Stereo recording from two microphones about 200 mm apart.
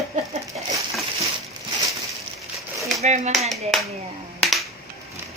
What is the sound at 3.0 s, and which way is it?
Speech, 35° right (ahead or behind).